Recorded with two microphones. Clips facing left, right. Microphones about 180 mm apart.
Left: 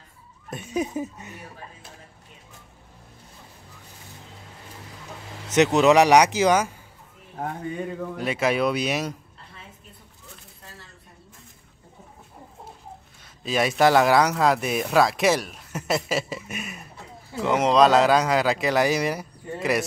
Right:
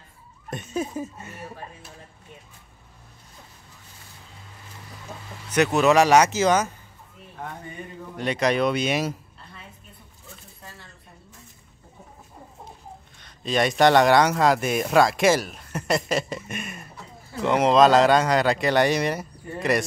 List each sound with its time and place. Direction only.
0.5 s speech: 10° left (ahead or behind)
5.5 s speech: 20° left (ahead or behind)
8.2 s speech: 5° left (ahead or behind)
13.2 s speech: 5° left (ahead or behind)